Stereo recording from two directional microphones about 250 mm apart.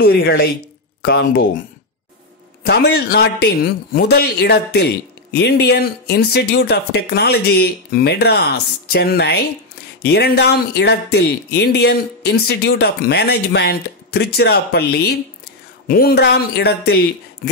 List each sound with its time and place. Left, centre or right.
0.1 s speech: left
2.6 s speech: left